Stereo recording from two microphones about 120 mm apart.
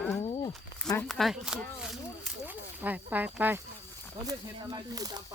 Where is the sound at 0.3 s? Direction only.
45° left (ahead or behind).